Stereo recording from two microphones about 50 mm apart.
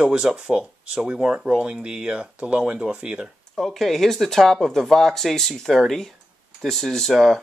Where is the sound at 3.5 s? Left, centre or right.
Centre.